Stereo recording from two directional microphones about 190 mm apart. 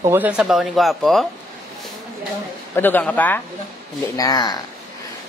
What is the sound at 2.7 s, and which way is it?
Speech, 10° left (ahead or behind).